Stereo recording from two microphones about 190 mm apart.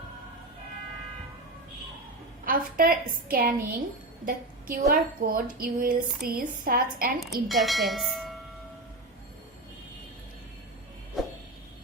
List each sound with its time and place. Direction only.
2.4 s a woman's voice: 50° right (ahead or behind)
7.4 s speech: centre (ahead or behind)
11.2 s a sound: centre (ahead or behind)